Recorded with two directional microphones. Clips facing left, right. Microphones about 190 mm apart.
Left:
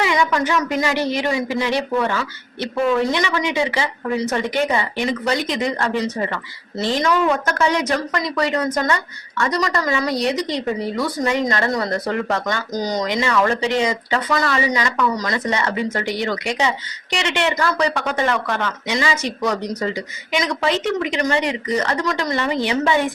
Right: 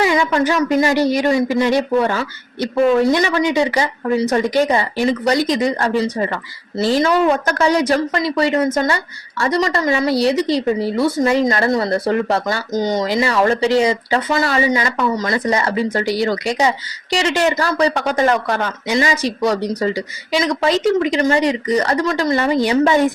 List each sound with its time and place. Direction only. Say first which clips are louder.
0.0 s a woman's voice: right 3 dB; 30° right (ahead or behind)